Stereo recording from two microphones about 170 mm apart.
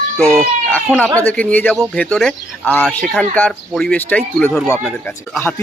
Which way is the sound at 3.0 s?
Centre (ahead or behind).